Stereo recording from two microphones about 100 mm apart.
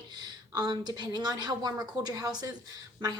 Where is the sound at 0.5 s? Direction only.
45° right (ahead or behind).